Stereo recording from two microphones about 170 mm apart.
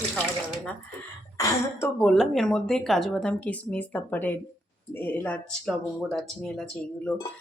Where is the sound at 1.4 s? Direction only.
20° left (ahead or behind).